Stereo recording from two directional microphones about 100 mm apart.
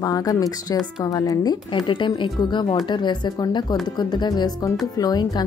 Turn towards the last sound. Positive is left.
turn(degrees=45)  # may be behind; listen again after turning